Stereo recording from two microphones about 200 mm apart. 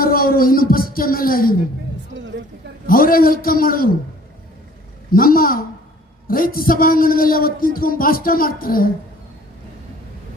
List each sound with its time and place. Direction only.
0.0 s a man's voice: 45° left (ahead or behind)
2.8 s a man's voice: 45° left (ahead or behind)
5.1 s a man's voice: 45° left (ahead or behind)